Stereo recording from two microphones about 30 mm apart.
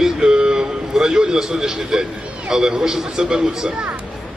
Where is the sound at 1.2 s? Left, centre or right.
Right.